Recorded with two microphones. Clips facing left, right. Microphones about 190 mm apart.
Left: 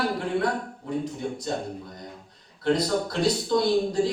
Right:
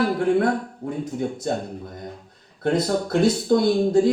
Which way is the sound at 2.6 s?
50° right (ahead or behind).